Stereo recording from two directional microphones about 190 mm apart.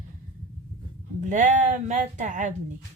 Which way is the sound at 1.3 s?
40° right (ahead or behind).